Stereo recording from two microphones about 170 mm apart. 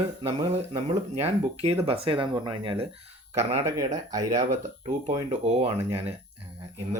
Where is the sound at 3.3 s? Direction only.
20° right (ahead or behind).